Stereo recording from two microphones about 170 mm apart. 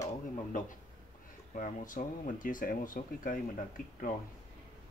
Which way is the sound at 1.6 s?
50° left (ahead or behind).